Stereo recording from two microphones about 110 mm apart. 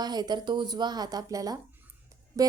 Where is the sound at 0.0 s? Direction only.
40° right (ahead or behind).